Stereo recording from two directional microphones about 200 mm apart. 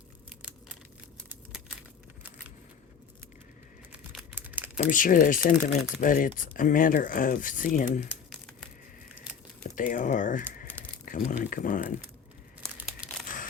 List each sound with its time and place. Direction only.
1.3 s crumpling: 5° right (ahead or behind)
3.9 s typing: 5° right (ahead or behind)
4.8 s speech: 40° left (ahead or behind)
8.3 s a sound: centre (ahead or behind)
9.6 s speech: 40° left (ahead or behind)
13.2 s a sound: 40° left (ahead or behind)